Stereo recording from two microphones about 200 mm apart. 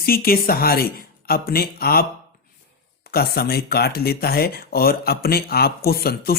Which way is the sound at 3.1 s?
50° left (ahead or behind).